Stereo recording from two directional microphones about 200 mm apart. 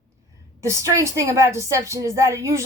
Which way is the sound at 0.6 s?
15° right (ahead or behind).